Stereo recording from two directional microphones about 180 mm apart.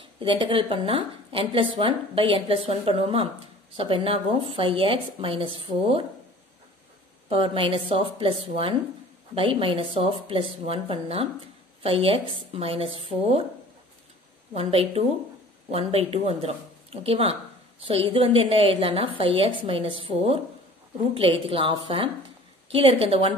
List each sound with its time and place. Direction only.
0.2 s a woman's voice: 30° right (ahead or behind)
7.2 s a woman's voice: 30° right (ahead or behind)
14.5 s a woman's voice: 35° right (ahead or behind)